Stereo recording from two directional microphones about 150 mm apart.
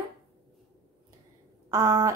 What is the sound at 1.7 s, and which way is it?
Speech, 20° right (ahead or behind).